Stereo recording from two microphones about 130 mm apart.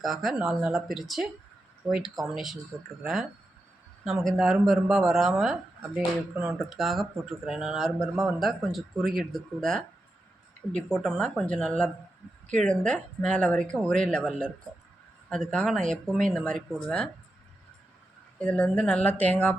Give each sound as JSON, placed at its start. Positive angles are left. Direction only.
{"t": 0.0, "sound": "speech", "side_deg": 0}
{"t": 10.9, "sound": "speech", "side_deg": 5}
{"t": 18.3, "sound": "speech", "side_deg": 10}